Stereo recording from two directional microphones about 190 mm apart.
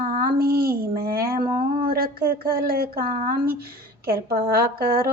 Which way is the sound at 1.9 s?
50° right (ahead or behind).